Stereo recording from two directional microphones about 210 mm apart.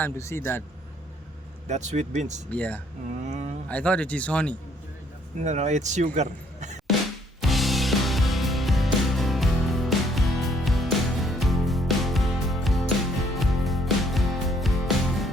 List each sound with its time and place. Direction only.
0.0 s a man's voice: 10° left (ahead or behind)
1.6 s a man's voice: 35° right (ahead or behind)
2.5 s a man's voice: 5° left (ahead or behind)
3.2 s a man's voice: 35° right (ahead or behind)
3.7 s a man's voice: 5° left (ahead or behind)
5.4 s a man's voice: 35° right (ahead or behind)
7.4 s music: centre (ahead or behind)